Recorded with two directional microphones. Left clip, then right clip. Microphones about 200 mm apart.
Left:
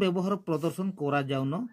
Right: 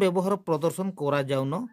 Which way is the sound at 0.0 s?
40° right (ahead or behind).